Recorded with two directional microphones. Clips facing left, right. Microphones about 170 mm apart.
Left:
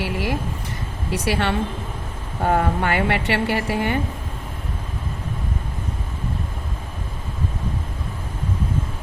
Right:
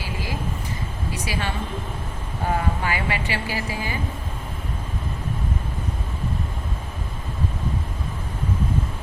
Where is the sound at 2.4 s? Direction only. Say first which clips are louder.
Left 5 dB; 55° left (ahead or behind).